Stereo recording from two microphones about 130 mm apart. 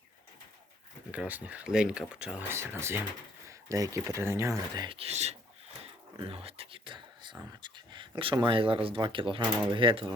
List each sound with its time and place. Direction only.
1.1 s speech: 10° right (ahead or behind)
2.5 s speech: 20° right (ahead or behind)
4.9 s speech: 55° right (ahead or behind)
5.8 s a sound: 50° right (ahead or behind)
7.6 s speech: 40° right (ahead or behind)